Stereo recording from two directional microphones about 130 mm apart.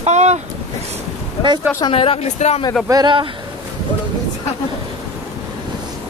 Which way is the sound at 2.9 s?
35° right (ahead or behind).